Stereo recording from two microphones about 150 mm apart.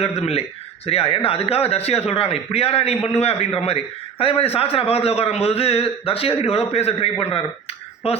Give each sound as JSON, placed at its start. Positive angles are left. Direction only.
{"t": 0.0, "sound": "a man's voice", "side_deg": 45}